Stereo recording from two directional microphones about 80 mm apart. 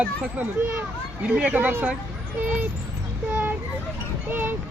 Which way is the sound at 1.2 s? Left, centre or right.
Centre.